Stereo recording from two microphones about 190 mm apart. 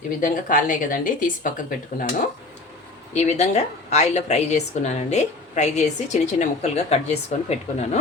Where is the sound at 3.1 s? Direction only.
35° left (ahead or behind).